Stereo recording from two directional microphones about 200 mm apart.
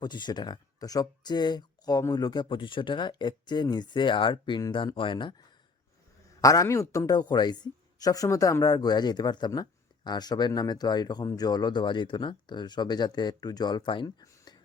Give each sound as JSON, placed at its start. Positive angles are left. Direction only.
{"t": 0.0, "sound": "speech", "side_deg": 20}
{"t": 6.4, "sound": "speech", "side_deg": 15}